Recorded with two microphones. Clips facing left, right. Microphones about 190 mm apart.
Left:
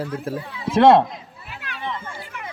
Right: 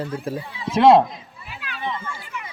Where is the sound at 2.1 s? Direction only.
55° left (ahead or behind).